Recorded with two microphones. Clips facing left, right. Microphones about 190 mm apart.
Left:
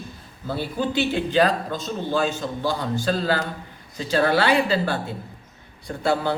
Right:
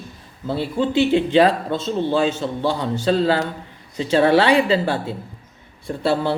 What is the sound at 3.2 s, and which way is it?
A man's voice, 25° right (ahead or behind).